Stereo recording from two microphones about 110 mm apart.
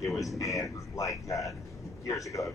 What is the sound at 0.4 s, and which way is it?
A man's voice, 30° left (ahead or behind).